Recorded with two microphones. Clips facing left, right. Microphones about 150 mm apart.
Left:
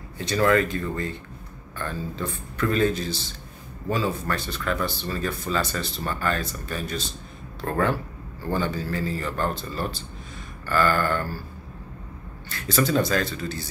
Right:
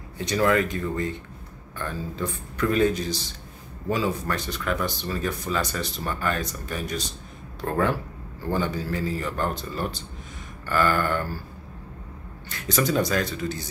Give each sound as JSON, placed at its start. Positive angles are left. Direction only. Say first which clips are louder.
{"t": 0.2, "sound": "speech", "louder": "left 1 dB", "side_deg": -15}
{"t": 12.4, "sound": "speech", "louder": "left 1 dB", "side_deg": -15}